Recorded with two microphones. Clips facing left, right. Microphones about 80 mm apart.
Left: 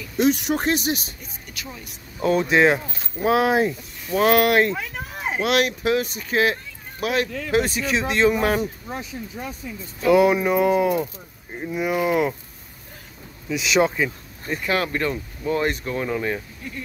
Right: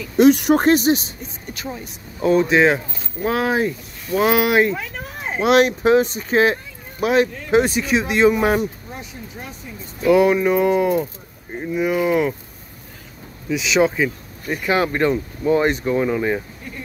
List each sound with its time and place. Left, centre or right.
0.2 s speech: right
2.1 s speech: centre
5.4 s speech: right; by 8.6 s centre
10.0 s speech: centre
13.5 s speech: centre
14.5 s speech: centre